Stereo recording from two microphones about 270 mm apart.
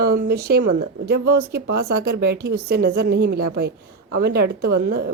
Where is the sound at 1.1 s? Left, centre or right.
Right.